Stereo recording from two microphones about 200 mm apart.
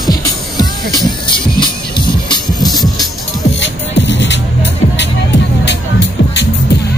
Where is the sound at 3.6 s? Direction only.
65° left (ahead or behind).